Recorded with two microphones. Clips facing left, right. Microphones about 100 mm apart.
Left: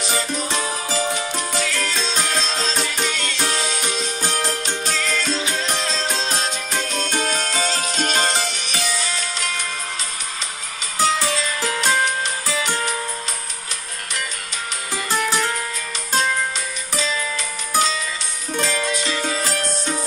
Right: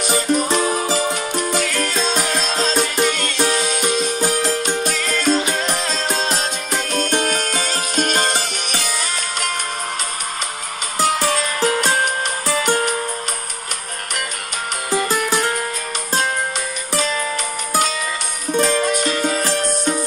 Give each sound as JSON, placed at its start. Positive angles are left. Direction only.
{"t": 0.0, "sound": "music", "side_deg": -55}
{"t": 11.0, "sound": "music", "side_deg": -50}
{"t": 15.3, "sound": "music", "side_deg": -50}
{"t": 16.9, "sound": "music", "side_deg": -50}